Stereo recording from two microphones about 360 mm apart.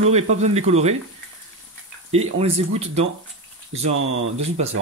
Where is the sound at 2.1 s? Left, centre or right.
Centre.